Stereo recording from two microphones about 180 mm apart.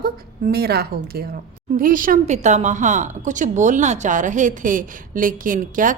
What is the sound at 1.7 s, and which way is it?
A woman's voice, 50° right (ahead or behind).